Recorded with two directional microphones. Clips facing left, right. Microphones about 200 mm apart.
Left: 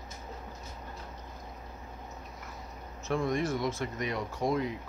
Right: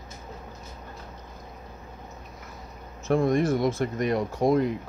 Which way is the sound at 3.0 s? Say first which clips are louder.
Right 8 dB; 50° right (ahead or behind).